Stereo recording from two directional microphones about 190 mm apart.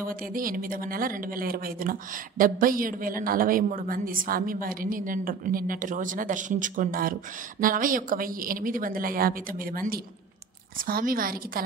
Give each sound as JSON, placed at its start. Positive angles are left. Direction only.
{"t": 0.0, "sound": "speech", "side_deg": -45}